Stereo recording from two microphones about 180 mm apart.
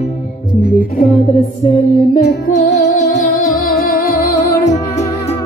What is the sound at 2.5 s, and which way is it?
Music, 40° left (ahead or behind).